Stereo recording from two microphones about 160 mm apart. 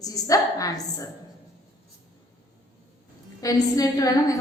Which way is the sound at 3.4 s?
20° left (ahead or behind).